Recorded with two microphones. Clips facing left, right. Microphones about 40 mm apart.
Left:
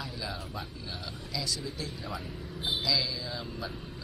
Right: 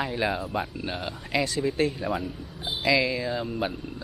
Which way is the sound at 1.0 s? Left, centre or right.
Right.